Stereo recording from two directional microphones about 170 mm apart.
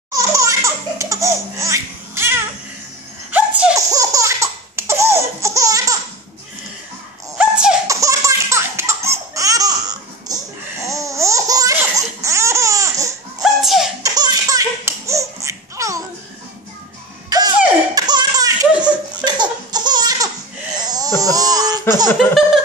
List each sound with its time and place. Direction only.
0.1 s laughter: 20° right (ahead or behind)
3.3 s sneeze: 10° right (ahead or behind)
3.7 s laughter: 20° right (ahead or behind)
7.3 s beatboxing: 5° right (ahead or behind)
7.8 s laughter: 20° right (ahead or behind)
13.4 s laughter: centre (ahead or behind)
14.0 s laughter: 20° right (ahead or behind)
17.3 s a sound: 25° right (ahead or behind)
17.9 s laughter: 25° right (ahead or behind)
20.7 s a sound: 25° right (ahead or behind)